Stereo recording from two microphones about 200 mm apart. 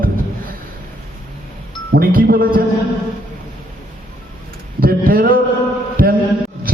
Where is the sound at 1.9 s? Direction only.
45° right (ahead or behind).